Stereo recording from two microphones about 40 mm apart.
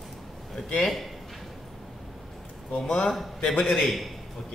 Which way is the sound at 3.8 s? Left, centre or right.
Centre.